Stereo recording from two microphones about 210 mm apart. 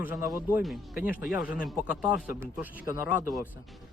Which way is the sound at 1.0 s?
40° left (ahead or behind).